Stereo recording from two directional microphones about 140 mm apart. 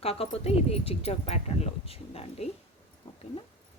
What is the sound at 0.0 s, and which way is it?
Speech, 45° left (ahead or behind).